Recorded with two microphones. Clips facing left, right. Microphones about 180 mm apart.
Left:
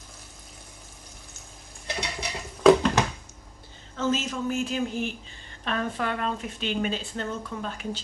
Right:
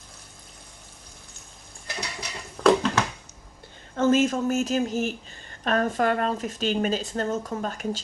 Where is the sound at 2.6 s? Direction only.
75° right (ahead or behind).